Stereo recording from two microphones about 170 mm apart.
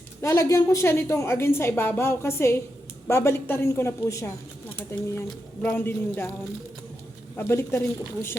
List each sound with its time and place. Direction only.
0.2 s a woman's voice: 15° left (ahead or behind)
7.3 s a woman's voice: 15° left (ahead or behind)